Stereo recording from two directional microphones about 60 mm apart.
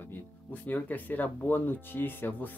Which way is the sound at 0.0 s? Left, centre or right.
Left.